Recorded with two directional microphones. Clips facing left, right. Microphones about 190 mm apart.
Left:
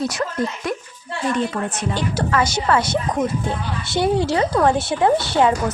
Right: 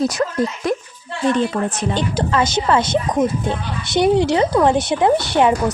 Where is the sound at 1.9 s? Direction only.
20° right (ahead or behind).